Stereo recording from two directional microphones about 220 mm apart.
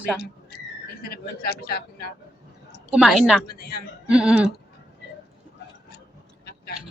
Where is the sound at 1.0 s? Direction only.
45° left (ahead or behind).